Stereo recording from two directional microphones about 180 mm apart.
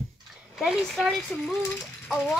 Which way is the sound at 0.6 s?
Centre (ahead or behind).